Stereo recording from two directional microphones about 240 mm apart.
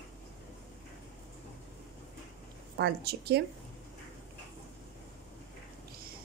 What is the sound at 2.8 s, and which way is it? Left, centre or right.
Speech, right.